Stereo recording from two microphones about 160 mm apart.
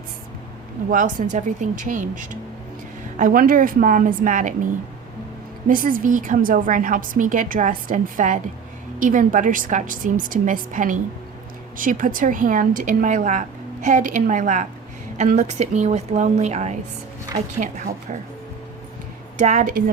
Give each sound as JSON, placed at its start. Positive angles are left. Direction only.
{"t": 0.9, "sound": "a woman's voice", "side_deg": -55}
{"t": 5.6, "sound": "a woman's voice", "side_deg": -60}
{"t": 19.4, "sound": "speech", "side_deg": -50}